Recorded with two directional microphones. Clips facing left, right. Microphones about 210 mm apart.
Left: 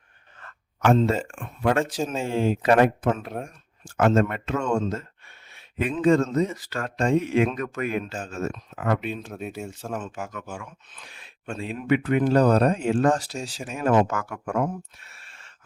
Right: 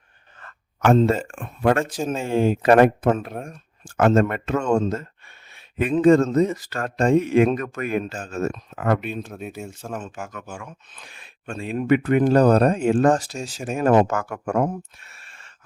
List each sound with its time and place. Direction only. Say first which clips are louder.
0.9 s speech: right 3 dB; 50° right (ahead or behind)
9.0 s speech: right 1 dB; centre (ahead or behind)
11.6 s speech: right 4 dB; 50° right (ahead or behind)